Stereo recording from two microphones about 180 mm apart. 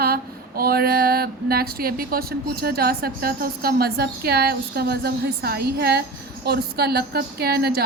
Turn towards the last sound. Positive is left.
turn(degrees=-60)  # may be behind; listen again after turning